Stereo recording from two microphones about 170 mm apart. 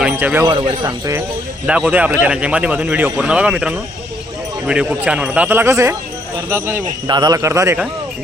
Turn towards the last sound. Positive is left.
turn(degrees=-15)  # may be behind; listen again after turning